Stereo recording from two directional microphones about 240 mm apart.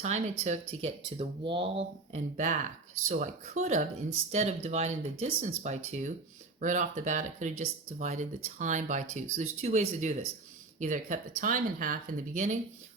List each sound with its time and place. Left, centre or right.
0.0 s speech: right